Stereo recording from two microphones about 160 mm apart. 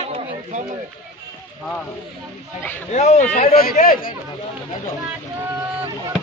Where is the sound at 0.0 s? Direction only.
45° right (ahead or behind).